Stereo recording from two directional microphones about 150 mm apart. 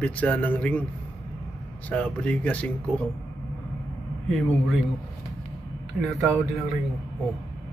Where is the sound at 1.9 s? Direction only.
5° left (ahead or behind).